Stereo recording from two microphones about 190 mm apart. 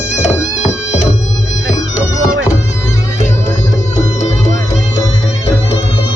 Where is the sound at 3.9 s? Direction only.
40° left (ahead or behind).